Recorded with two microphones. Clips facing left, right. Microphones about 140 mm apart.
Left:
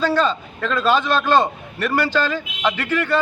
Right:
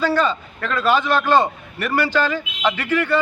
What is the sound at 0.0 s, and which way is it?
A man's voice, 10° right (ahead or behind).